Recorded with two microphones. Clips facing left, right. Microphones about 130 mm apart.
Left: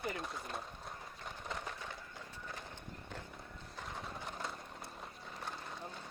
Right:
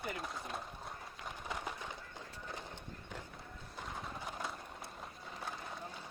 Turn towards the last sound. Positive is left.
turn(degrees=-5)  # may be behind; listen again after turning